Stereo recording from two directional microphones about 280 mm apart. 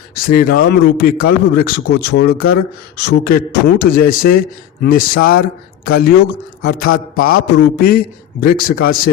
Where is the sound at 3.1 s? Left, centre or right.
Left.